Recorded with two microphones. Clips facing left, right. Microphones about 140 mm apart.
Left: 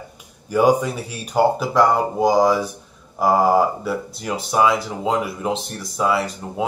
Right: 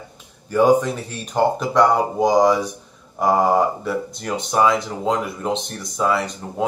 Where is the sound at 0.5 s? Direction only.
10° left (ahead or behind).